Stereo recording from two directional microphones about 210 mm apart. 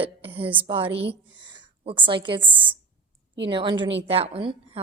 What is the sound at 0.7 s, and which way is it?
A woman's voice, 25° right (ahead or behind).